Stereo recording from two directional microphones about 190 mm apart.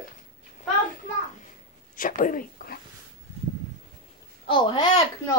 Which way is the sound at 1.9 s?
45° left (ahead or behind).